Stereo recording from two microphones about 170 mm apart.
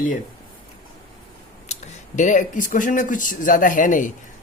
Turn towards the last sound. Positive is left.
turn(degrees=50)  # may be behind; listen again after turning